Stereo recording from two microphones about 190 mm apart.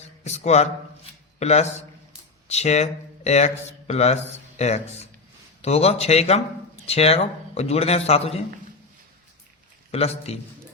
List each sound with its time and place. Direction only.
0.3 s a man's voice: 35° left (ahead or behind)
9.9 s a man's voice: 35° left (ahead or behind)